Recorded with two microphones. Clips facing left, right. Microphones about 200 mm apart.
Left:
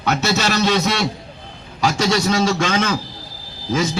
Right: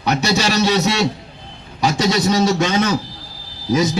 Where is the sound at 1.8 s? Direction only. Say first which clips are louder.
Right 1 dB; 15° right (ahead or behind).